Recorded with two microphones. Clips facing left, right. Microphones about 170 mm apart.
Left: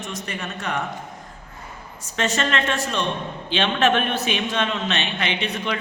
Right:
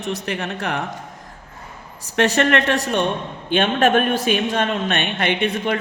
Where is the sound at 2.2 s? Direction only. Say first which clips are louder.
Right 6 dB; 65° right (ahead or behind).